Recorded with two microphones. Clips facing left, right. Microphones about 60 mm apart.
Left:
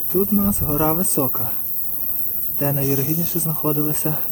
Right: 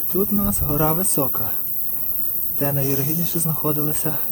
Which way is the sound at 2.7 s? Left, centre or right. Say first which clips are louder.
Left 3 dB; centre.